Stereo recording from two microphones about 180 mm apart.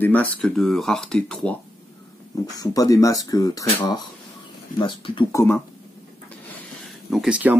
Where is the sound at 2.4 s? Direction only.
20° left (ahead or behind).